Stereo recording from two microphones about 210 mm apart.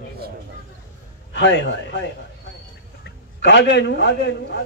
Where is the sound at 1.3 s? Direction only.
55° left (ahead or behind).